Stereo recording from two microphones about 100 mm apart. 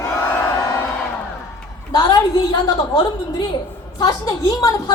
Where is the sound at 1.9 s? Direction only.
35° left (ahead or behind).